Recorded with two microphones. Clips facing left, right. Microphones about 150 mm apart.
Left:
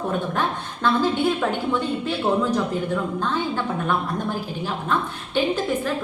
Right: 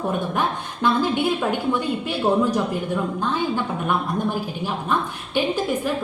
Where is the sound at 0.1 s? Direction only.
15° right (ahead or behind).